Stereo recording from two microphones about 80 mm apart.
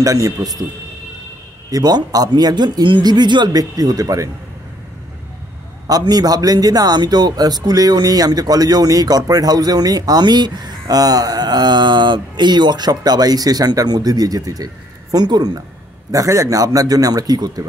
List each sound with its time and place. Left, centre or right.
0.0 s a man's voice: right
1.7 s a man's voice: right
3.7 s a man's voice: right
5.9 s a man's voice: right
16.1 s a man's voice: right